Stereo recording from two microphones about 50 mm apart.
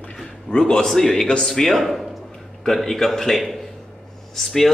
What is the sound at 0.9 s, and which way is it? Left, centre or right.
A man's voice, centre.